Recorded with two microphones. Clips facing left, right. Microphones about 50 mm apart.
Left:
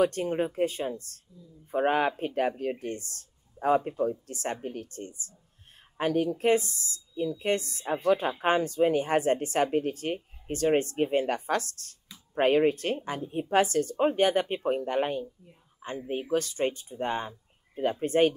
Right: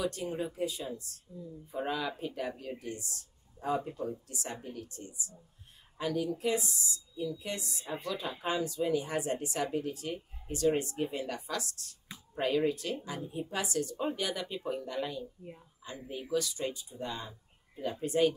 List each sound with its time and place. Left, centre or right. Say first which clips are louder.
0.0 s a woman's voice: left 8 dB; left